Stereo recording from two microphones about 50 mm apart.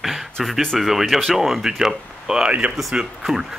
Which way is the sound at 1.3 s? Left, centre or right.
Centre.